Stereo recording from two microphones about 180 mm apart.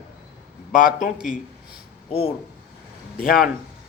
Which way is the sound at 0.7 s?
50° left (ahead or behind).